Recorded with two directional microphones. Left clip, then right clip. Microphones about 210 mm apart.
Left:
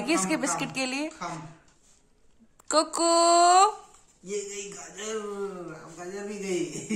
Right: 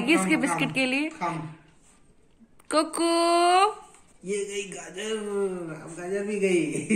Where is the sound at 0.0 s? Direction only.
10° left (ahead or behind).